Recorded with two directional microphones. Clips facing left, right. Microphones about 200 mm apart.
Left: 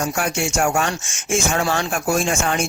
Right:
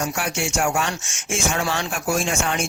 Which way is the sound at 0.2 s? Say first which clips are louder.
Left 5 dB; 45° left (ahead or behind).